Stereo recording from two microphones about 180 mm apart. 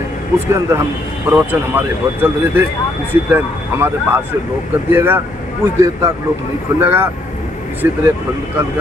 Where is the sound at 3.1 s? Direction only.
10° right (ahead or behind).